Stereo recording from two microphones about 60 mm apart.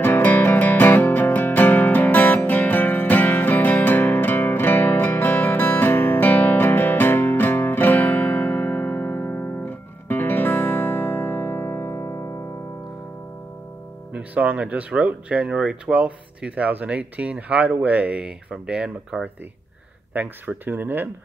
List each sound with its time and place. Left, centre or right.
0.0 s music: left
14.1 s music: right
14.9 s speech: right
20.2 s speech: right